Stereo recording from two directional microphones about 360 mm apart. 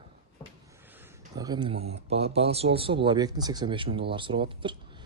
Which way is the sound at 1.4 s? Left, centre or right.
Centre.